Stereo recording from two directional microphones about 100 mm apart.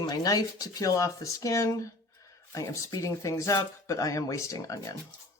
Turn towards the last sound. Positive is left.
turn(degrees=35)  # may be behind; listen again after turning